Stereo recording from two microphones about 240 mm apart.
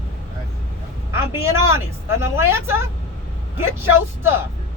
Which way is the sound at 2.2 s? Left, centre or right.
Centre.